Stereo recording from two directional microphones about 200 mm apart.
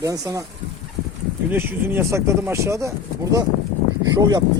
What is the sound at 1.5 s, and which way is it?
Speech, 10° right (ahead or behind).